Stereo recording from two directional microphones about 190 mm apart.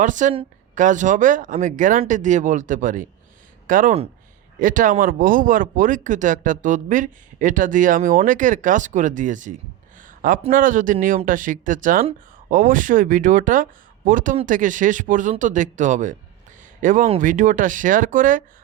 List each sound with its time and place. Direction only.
0.0 s speech: 40° right (ahead or behind)